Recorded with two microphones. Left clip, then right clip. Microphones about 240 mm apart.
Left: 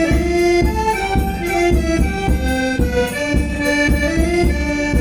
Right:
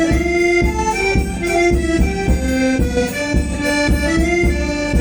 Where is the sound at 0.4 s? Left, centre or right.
Right.